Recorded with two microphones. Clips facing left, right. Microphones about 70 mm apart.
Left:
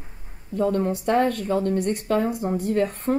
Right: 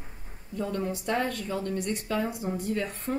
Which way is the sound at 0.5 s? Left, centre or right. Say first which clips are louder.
Left 8 dB; left.